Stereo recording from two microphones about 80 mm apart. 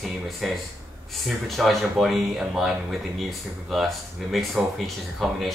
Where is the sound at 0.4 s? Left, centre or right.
Centre.